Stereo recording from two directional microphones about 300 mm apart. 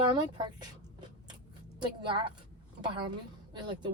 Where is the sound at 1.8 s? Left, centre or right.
Centre.